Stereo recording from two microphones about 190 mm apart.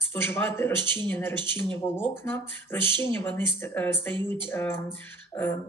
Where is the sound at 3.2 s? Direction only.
10° left (ahead or behind).